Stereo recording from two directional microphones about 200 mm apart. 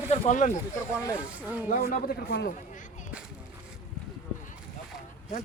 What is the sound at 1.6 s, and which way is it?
Speech, 45° left (ahead or behind).